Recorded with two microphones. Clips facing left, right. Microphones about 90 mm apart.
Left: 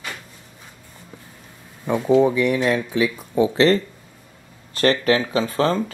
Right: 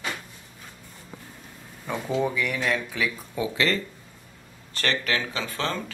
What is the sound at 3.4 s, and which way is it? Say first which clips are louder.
Speech: left 9 dB; 35° left (ahead or behind).